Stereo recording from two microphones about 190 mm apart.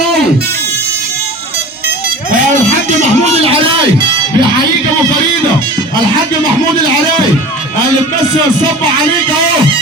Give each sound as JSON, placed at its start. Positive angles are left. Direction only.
{"t": 3.4, "sound": "speech", "side_deg": -30}